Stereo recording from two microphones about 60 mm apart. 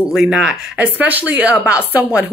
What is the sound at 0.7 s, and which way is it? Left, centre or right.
A woman's voice, right.